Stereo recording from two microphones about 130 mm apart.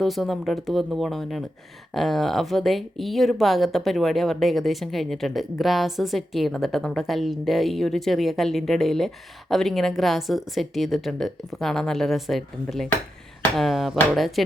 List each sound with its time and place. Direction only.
0.0 s speech: centre (ahead or behind)